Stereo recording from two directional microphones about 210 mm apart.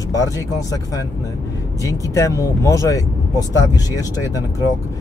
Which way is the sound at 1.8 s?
15° left (ahead or behind).